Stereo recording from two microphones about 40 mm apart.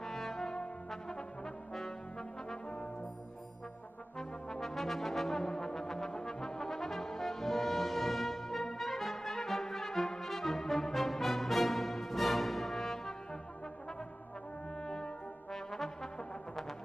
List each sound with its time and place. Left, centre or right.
0.0 s brass instrument: centre
4.2 s brass instrument: centre
14.8 s brass instrument: centre